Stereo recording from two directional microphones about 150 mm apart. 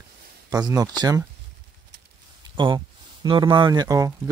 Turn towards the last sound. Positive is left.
turn(degrees=-20)  # may be behind; listen again after turning